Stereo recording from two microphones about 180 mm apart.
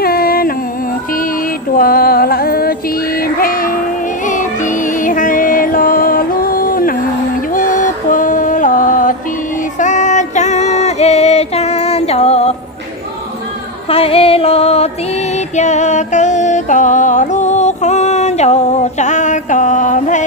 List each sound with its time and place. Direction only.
0.0 s a sound: 55° left (ahead or behind)
1.8 s music: 55° left (ahead or behind)
9.8 s female singing: 45° left (ahead or behind)
13.8 s music: 30° left (ahead or behind)